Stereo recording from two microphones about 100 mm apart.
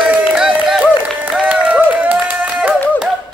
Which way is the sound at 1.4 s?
15° right (ahead or behind).